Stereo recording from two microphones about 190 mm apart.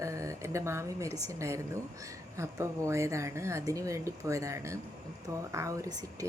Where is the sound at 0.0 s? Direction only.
15° right (ahead or behind).